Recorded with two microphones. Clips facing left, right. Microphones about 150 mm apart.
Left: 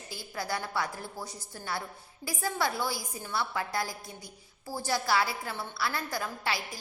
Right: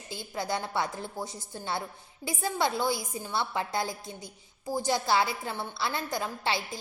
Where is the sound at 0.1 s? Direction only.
20° right (ahead or behind).